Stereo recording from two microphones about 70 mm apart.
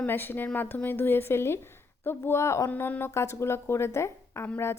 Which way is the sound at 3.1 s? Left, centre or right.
Left.